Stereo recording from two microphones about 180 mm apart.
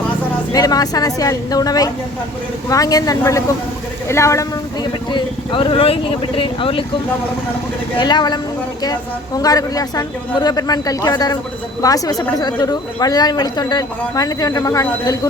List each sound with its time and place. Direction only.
0.5 s a woman's voice: 20° left (ahead or behind)
7.9 s a woman's voice: 25° left (ahead or behind)